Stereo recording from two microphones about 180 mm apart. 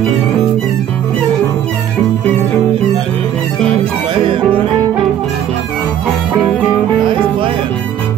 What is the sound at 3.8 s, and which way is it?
Music, 30° right (ahead or behind).